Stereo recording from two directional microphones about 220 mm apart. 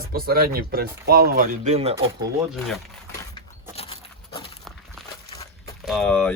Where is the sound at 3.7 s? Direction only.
25° left (ahead or behind).